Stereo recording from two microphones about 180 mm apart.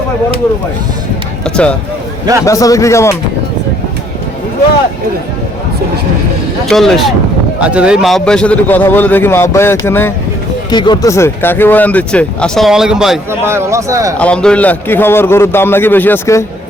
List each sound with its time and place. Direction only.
1.5 s speech: 5° left (ahead or behind)
2.4 s speech: 20° left (ahead or behind)
6.7 s speech: centre (ahead or behind)
10.7 s speech: 25° left (ahead or behind); by 13.1 s centre (ahead or behind)
13.4 s speech: 15° right (ahead or behind)
14.2 s speech: 5° left (ahead or behind)